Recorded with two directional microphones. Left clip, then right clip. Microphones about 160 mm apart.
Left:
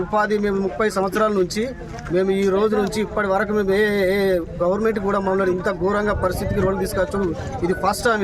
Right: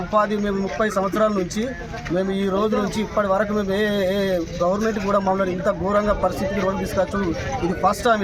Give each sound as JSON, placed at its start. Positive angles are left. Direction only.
{"t": 0.1, "sound": "a man's voice", "side_deg": 35}
{"t": 7.9, "sound": "a man's voice", "side_deg": 30}